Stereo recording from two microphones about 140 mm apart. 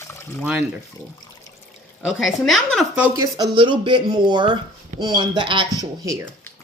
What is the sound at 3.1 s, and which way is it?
Speech, 25° right (ahead or behind).